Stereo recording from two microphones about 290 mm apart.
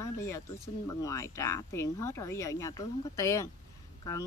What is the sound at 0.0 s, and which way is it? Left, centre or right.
Speech, centre.